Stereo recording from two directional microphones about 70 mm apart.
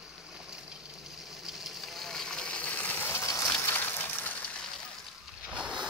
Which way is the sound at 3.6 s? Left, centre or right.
Left.